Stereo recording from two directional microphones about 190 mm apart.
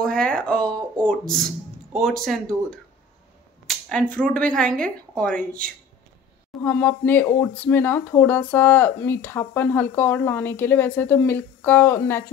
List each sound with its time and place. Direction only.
0.0 s a sound: 5° left (ahead or behind)
0.9 s a woman's voice: 5° left (ahead or behind)
4.1 s a woman's voice: 5° left (ahead or behind)
6.6 s speech: 10° left (ahead or behind)